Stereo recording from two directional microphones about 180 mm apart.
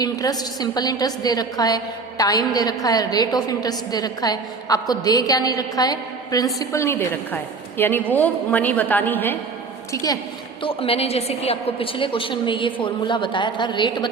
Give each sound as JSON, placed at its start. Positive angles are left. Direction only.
{"t": 0.0, "sound": "a woman's voice", "side_deg": 20}
{"t": 10.6, "sound": "a woman's voice", "side_deg": 30}